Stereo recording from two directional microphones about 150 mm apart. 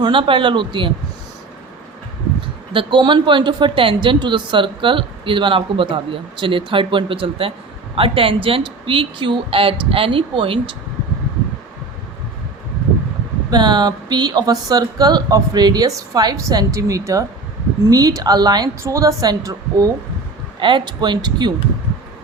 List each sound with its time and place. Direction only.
0.0 s speech: 35° right (ahead or behind)
2.7 s speech: 30° right (ahead or behind)
13.5 s speech: 30° right (ahead or behind)
20.6 s speech: 35° right (ahead or behind)